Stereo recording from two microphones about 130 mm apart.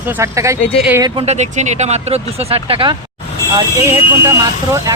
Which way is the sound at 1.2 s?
60° right (ahead or behind).